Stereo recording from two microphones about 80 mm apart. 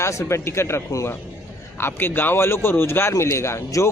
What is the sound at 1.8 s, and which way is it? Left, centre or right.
A man's voice, left.